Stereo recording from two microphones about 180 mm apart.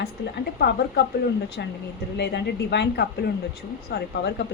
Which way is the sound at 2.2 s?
70° left (ahead or behind).